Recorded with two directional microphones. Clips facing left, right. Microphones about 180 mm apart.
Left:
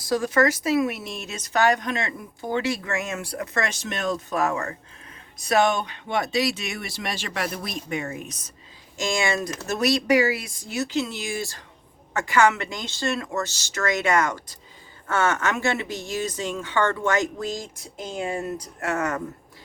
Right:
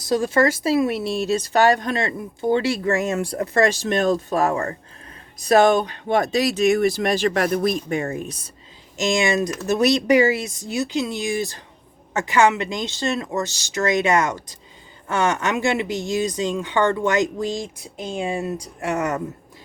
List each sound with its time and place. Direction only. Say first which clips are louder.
0.0 s speech: right 3 dB; 25° right (ahead or behind)
9.0 s speech: right 5 dB; 20° right (ahead or behind)
17.9 s speech: right 3 dB; 25° right (ahead or behind)
18.3 s speech: right 3 dB; 15° right (ahead or behind)